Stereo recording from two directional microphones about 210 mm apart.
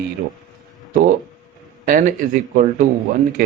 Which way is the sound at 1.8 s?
40° right (ahead or behind).